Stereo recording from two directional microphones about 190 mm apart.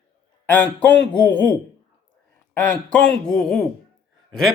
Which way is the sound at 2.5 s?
5° left (ahead or behind).